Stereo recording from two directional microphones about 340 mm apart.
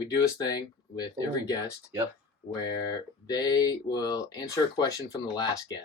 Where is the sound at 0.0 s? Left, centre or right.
Centre.